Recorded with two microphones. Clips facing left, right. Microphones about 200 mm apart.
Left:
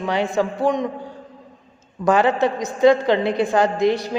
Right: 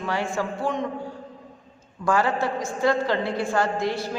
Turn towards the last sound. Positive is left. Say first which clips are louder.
# left 7 dB
turn(degrees=20)  # may be behind; listen again after turning